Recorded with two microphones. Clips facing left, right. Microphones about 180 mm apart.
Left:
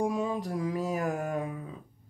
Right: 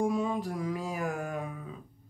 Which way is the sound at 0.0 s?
40° left (ahead or behind).